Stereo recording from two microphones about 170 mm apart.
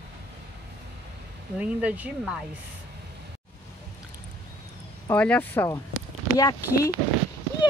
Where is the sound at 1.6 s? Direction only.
10° right (ahead or behind).